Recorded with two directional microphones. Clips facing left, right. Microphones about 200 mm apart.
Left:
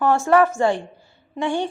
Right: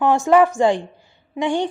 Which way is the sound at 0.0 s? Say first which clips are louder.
Right 2 dB; 15° right (ahead or behind).